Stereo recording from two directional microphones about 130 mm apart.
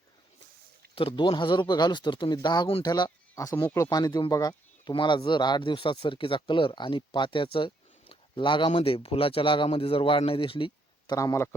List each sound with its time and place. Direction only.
0.9 s speech: 40° left (ahead or behind)
11.1 s a man's voice: 25° left (ahead or behind)